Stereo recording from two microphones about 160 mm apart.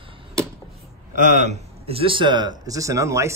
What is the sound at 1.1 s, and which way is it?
Speech, 50° right (ahead or behind).